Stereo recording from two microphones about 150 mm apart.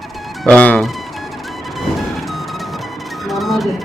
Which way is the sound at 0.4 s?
10° left (ahead or behind).